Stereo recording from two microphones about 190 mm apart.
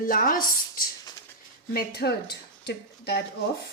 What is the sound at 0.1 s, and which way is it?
Speech, 45° left (ahead or behind).